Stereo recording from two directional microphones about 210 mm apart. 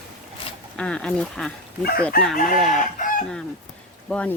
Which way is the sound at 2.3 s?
40° left (ahead or behind).